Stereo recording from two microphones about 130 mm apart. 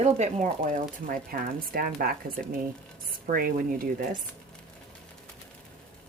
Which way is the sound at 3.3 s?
90° right.